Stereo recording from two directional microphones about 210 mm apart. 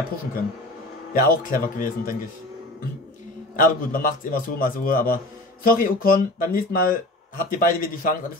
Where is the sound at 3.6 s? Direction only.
40° left (ahead or behind).